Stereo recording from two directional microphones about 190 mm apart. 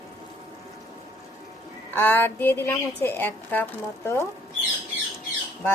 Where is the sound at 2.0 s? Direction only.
10° left (ahead or behind).